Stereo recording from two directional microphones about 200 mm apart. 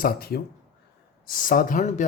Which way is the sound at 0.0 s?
50° left (ahead or behind).